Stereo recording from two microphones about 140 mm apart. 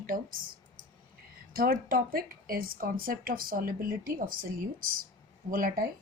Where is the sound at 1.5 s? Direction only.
90° right.